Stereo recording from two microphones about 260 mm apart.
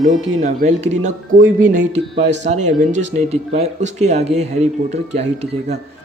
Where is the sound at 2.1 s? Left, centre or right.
Right.